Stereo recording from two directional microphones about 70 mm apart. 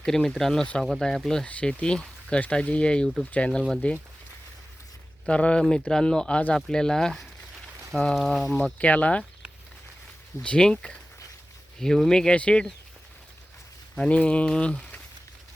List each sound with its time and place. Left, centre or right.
0.0 s speech: centre
1.5 s speech: centre
5.2 s speech: centre
8.5 s speech: centre
10.4 s speech: centre
13.9 s speech: centre